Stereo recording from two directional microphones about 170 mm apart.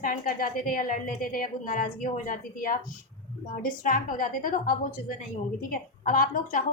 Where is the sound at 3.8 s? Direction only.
55° left (ahead or behind).